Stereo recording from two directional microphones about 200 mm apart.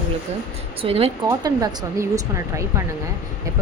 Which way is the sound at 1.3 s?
20° right (ahead or behind).